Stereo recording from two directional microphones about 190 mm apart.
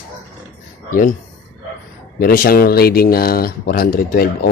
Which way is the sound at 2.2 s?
50° left (ahead or behind).